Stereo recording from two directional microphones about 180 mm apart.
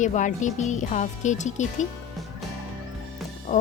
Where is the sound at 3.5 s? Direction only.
35° left (ahead or behind).